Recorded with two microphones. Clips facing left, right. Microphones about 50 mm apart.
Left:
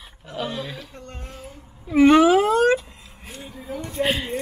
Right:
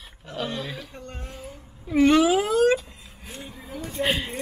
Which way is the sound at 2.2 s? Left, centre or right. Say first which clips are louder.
Left 3 dB; left.